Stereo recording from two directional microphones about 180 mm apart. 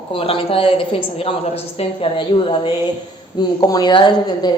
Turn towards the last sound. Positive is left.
turn(degrees=25)  # may be behind; listen again after turning